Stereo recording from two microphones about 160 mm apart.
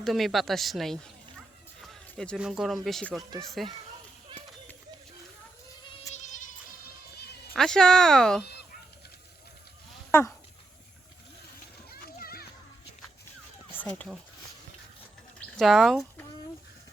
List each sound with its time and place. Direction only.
0.0 s speech: centre (ahead or behind)
6.1 s music: 50° left (ahead or behind)
7.5 s speech: 5° left (ahead or behind)
10.1 s a sound: 15° left (ahead or behind)
11.9 s splash: 70° left (ahead or behind)
13.7 s speech: 10° left (ahead or behind)
15.5 s speech: centre (ahead or behind)